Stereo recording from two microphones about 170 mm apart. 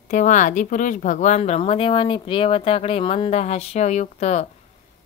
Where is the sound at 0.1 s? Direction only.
45° left (ahead or behind).